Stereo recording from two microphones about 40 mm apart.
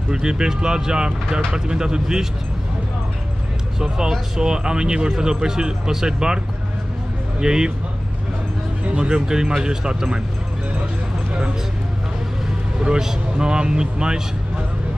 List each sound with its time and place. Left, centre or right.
0.1 s speech: centre
4.4 s speech: centre
8.9 s speech: right
13.0 s speech: right